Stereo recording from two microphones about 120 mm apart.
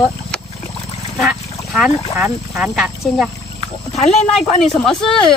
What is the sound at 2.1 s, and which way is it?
Speech, 25° right (ahead or behind).